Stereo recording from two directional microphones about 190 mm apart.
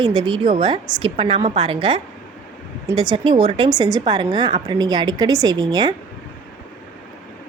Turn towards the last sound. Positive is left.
turn(degrees=-20)  # may be behind; listen again after turning